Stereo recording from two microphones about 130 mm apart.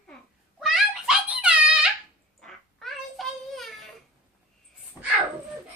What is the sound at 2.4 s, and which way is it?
Child singing, centre (ahead or behind).